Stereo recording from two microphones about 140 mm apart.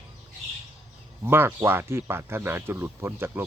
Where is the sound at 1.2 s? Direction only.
15° right (ahead or behind).